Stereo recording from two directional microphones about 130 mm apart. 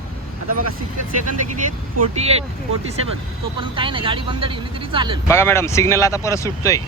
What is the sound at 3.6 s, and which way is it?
Speech, 40° right (ahead or behind).